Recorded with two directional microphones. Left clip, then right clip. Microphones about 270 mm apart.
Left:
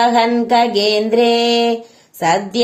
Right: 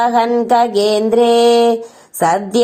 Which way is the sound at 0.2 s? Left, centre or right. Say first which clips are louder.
Right 1 dB; right.